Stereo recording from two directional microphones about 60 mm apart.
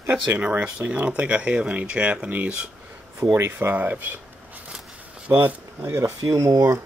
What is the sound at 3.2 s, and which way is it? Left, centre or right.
Speech, right.